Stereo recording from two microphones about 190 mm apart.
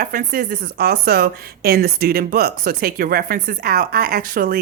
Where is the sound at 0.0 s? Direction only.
45° right (ahead or behind).